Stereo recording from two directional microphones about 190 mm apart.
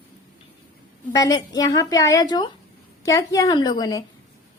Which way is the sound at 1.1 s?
20° left (ahead or behind).